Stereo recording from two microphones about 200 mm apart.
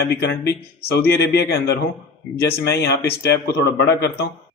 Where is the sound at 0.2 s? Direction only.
55° left (ahead or behind).